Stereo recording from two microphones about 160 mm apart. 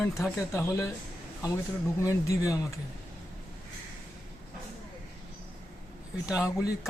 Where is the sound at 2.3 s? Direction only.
20° left (ahead or behind).